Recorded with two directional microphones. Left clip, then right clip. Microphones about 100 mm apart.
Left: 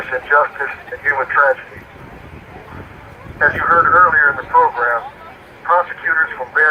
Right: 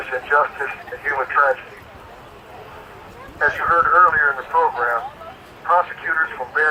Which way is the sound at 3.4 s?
45° left (ahead or behind).